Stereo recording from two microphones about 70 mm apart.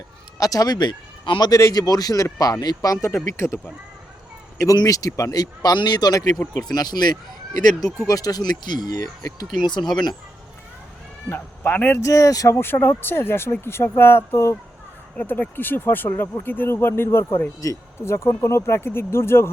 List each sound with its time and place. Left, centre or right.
0.3 s speech: left
1.4 s speech: left
3.3 s speech: left
4.6 s speech: left
6.7 s speech: left
8.0 s speech: left
9.6 s speech: left
9.8 s speech: centre
11.3 s speech: left
11.9 s speech: left
12.5 s speech: left
15.1 s speech: left
17.6 s speech: left